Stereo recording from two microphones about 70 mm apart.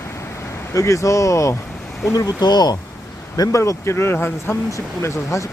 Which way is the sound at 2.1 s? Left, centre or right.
Left.